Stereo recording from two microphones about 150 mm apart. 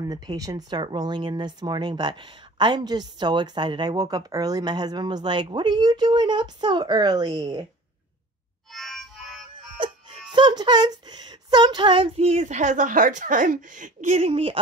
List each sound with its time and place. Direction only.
0.0 s speech: 25° right (ahead or behind)
8.7 s music: centre (ahead or behind)
10.3 s speech: 30° right (ahead or behind)